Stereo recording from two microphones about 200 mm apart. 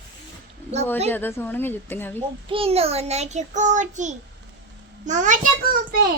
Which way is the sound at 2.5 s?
30° right (ahead or behind).